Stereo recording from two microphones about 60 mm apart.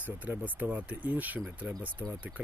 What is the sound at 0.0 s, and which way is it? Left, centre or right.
Speech, right.